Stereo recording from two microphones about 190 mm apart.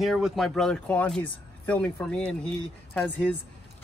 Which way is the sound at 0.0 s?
Centre (ahead or behind).